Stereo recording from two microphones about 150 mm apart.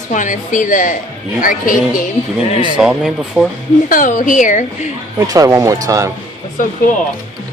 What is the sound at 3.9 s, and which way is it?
Speech, 60° left (ahead or behind).